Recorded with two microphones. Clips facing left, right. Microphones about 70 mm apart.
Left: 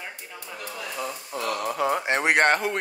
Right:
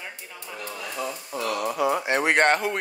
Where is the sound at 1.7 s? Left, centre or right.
Left.